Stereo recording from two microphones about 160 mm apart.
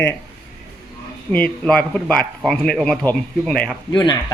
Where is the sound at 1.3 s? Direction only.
10° left (ahead or behind).